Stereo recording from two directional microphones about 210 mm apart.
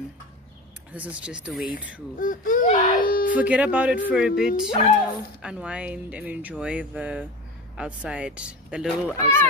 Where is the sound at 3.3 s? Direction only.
5° right (ahead or behind).